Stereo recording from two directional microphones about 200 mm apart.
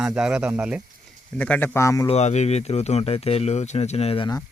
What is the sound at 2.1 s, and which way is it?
Speech, 35° left (ahead or behind).